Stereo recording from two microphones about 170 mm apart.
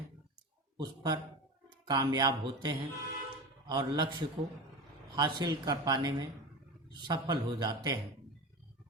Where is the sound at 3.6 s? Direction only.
25° right (ahead or behind).